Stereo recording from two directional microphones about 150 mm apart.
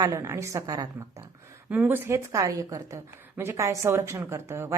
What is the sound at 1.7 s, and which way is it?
A woman's voice, 10° right (ahead or behind).